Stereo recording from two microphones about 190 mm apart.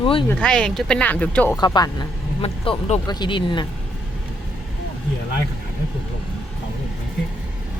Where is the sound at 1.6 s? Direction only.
20° left (ahead or behind).